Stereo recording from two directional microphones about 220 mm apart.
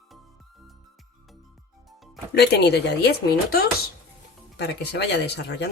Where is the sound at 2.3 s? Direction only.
50° left (ahead or behind).